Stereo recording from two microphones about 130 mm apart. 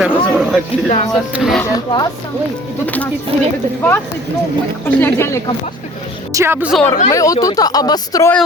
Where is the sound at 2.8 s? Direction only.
10° left (ahead or behind).